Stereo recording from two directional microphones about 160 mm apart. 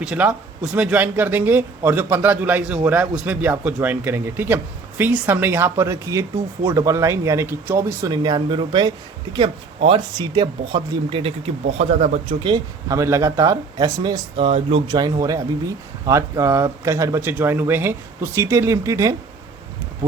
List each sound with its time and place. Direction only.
0.0 s speech: 5° right (ahead or behind); by 14.2 s 25° right (ahead or behind)
14.3 s speech: 35° right (ahead or behind)
14.8 s speech: 25° right (ahead or behind)